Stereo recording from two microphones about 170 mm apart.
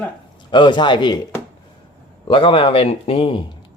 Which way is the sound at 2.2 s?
30° left (ahead or behind).